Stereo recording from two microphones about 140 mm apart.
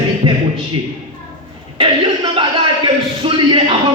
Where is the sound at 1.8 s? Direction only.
35° right (ahead or behind).